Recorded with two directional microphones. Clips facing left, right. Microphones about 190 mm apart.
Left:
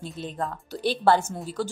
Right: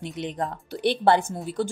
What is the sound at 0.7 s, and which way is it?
Speech, 60° right (ahead or behind).